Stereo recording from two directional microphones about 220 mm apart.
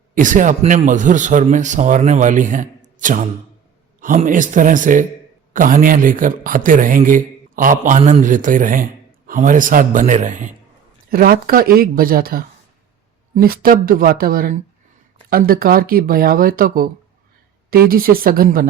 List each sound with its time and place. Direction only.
0.1 s a man's voice: 35° right (ahead or behind)